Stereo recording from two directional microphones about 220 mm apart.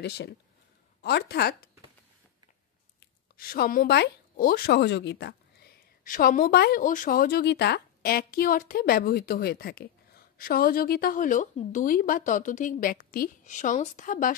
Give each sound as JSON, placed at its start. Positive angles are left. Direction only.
{"t": 0.0, "sound": "speech", "side_deg": 45}
{"t": 3.3, "sound": "a woman's voice", "side_deg": 40}